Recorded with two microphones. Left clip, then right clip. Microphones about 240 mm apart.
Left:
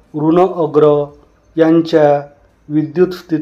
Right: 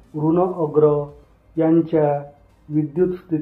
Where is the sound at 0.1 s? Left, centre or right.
Left.